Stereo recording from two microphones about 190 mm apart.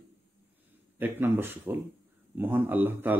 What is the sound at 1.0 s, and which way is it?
Speech, 10° right (ahead or behind).